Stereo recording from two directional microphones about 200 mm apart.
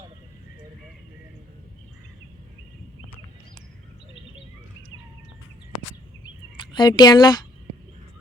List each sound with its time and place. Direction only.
6.6 s speech: 20° left (ahead or behind)